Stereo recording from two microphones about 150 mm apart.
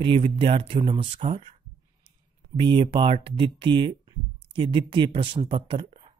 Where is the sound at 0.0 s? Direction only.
35° right (ahead or behind).